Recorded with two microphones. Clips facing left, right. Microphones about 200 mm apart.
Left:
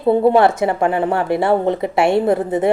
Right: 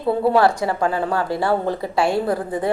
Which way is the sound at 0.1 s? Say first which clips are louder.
Left 4 dB; 25° left (ahead or behind).